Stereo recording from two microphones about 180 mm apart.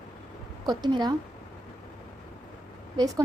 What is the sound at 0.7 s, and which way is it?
Speech, 25° right (ahead or behind).